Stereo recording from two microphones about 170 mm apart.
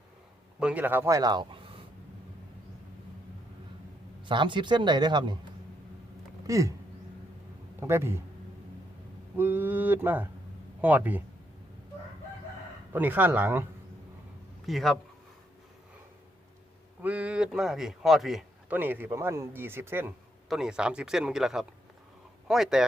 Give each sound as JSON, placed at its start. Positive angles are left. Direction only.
{"t": 0.6, "sound": "speech", "side_deg": -10}
{"t": 4.3, "sound": "speech", "side_deg": -30}
{"t": 6.5, "sound": "speech", "side_deg": -20}
{"t": 7.8, "sound": "a man's voice", "side_deg": -15}
{"t": 9.4, "sound": "a man's voice", "side_deg": -10}
{"t": 12.9, "sound": "a man's voice", "side_deg": -10}
{"t": 14.7, "sound": "speech", "side_deg": 0}
{"t": 17.0, "sound": "a man's voice", "side_deg": -10}